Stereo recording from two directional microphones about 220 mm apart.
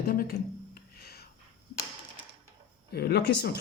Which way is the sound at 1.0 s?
45° left (ahead or behind).